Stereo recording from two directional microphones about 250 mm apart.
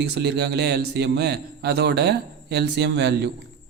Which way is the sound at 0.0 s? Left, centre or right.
Right.